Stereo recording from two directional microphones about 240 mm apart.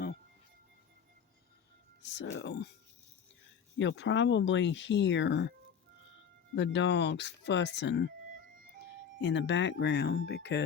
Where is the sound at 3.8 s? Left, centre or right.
Left.